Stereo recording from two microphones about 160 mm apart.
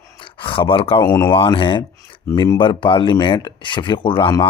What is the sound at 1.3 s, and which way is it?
Speech, 35° left (ahead or behind).